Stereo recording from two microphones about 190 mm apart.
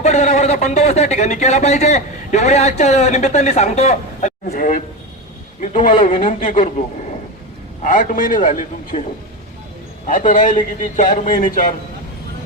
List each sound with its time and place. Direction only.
0.0 s speech: 35° left (ahead or behind)
7.8 s a man's voice: 45° left (ahead or behind)
10.1 s a man's voice: 45° left (ahead or behind)